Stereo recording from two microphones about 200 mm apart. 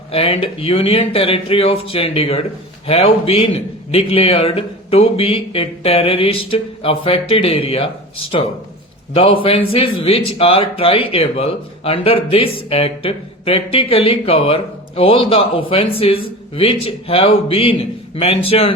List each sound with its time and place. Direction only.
0.1 s speech: 30° left (ahead or behind)
9.1 s speech: 25° left (ahead or behind)